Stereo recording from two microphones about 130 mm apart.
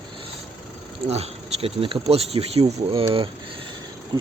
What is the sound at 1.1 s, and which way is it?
Speech, 50° right (ahead or behind).